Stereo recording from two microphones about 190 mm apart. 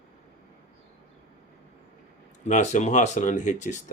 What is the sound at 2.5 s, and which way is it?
Speech, 40° left (ahead or behind).